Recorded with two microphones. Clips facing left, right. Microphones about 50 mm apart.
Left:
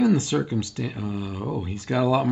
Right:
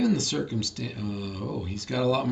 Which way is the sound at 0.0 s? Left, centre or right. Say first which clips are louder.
Left 4 dB; left.